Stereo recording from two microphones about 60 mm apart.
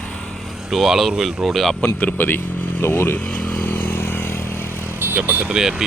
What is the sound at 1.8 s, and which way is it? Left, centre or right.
Speech, left.